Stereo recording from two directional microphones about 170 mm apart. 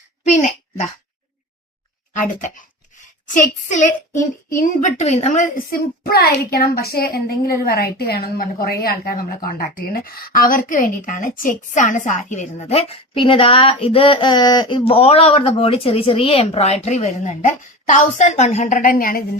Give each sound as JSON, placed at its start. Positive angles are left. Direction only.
{"t": 0.3, "sound": "a sound", "side_deg": 45}
{"t": 2.1, "sound": "a woman's voice", "side_deg": 50}
{"t": 6.0, "sound": "a woman's voice", "side_deg": 65}